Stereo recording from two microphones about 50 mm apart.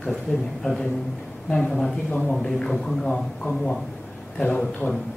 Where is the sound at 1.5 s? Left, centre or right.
Centre.